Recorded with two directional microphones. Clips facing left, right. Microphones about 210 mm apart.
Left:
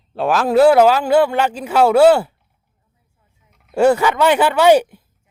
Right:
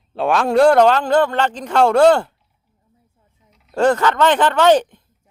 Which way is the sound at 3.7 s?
10° left (ahead or behind).